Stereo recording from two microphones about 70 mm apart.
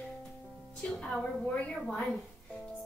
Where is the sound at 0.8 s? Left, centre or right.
Centre.